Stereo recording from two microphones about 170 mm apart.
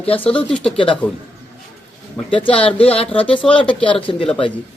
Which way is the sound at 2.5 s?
5° left (ahead or behind).